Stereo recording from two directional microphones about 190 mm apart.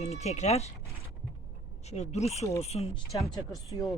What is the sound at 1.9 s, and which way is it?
Speech, 35° left (ahead or behind).